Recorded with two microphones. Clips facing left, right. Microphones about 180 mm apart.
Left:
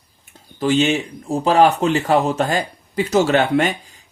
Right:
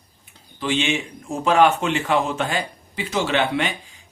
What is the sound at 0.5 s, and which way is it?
A man's voice, 40° left (ahead or behind).